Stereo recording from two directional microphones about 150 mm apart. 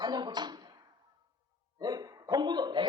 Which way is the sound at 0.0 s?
30° right (ahead or behind).